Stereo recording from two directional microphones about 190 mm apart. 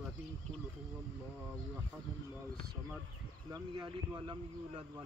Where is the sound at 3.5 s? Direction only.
20° right (ahead or behind).